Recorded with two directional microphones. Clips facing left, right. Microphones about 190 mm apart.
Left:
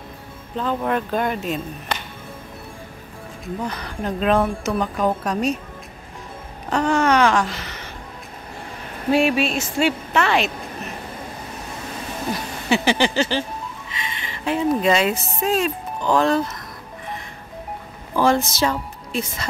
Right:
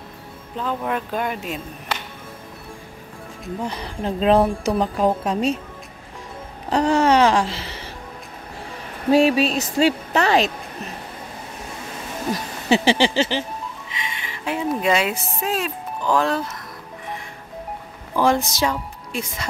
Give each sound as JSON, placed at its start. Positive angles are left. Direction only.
{"t": 0.6, "sound": "speech", "side_deg": -5}
{"t": 3.6, "sound": "a woman's voice", "side_deg": -30}
{"t": 6.7, "sound": "a sound", "side_deg": -35}
{"t": 9.1, "sound": "a woman's voice", "side_deg": -35}
{"t": 12.6, "sound": "a sound", "side_deg": -30}
{"t": 13.9, "sound": "music", "side_deg": -15}
{"t": 14.8, "sound": "speech", "side_deg": -10}
{"t": 18.2, "sound": "a woman's voice", "side_deg": -15}